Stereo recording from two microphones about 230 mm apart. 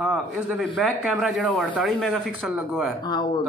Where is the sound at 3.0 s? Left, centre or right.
Centre.